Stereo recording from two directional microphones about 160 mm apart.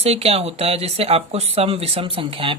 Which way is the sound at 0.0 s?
40° right (ahead or behind).